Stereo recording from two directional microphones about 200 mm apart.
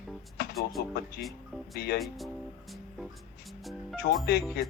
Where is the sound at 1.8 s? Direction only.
50° left (ahead or behind).